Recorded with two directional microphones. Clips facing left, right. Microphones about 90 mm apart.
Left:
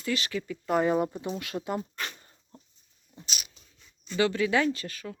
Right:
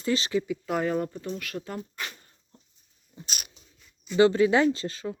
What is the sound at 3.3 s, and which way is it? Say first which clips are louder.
Dog: even; 50° right (ahead or behind).